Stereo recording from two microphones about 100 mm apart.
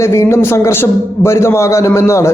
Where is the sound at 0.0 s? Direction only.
25° left (ahead or behind).